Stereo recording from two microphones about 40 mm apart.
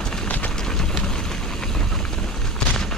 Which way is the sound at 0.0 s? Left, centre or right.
Centre.